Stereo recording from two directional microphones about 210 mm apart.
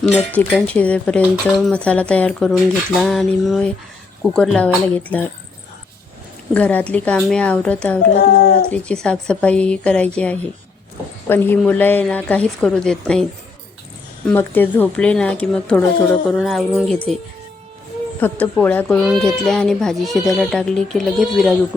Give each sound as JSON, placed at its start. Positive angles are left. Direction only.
{"t": 0.3, "sound": "speech", "side_deg": 5}
{"t": 6.5, "sound": "speech", "side_deg": 5}
{"t": 8.1, "sound": "speech", "side_deg": 45}
{"t": 8.7, "sound": "speech", "side_deg": 5}
{"t": 14.3, "sound": "speech", "side_deg": 10}
{"t": 18.2, "sound": "speech", "side_deg": 5}